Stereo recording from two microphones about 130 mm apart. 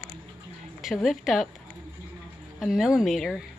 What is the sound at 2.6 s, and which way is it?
Speech, 5° right (ahead or behind).